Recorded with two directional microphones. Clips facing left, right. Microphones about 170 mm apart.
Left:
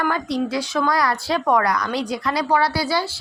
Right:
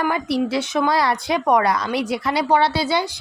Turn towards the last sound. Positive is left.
turn(degrees=-20)  # may be behind; listen again after turning